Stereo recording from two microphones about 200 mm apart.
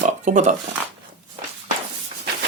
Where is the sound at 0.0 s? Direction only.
40° right (ahead or behind).